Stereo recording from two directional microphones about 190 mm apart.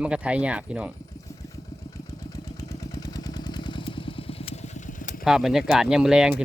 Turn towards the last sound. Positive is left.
turn(degrees=-5)  # may be behind; listen again after turning